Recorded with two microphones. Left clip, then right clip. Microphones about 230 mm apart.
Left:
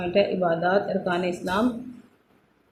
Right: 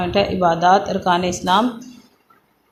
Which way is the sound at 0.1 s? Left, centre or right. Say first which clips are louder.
Right 4 dB; centre.